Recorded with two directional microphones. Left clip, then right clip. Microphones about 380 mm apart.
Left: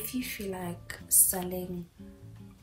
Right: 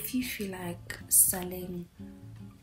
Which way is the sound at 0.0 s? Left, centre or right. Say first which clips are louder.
Right 1 dB; centre.